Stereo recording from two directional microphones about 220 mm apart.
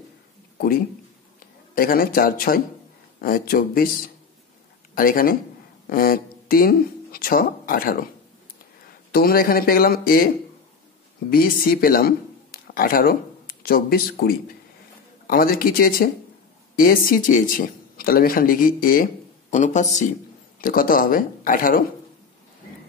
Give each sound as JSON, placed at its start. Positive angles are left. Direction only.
{"t": 1.8, "sound": "speech", "side_deg": 40}
{"t": 4.9, "sound": "speech", "side_deg": 40}
{"t": 9.1, "sound": "speech", "side_deg": 40}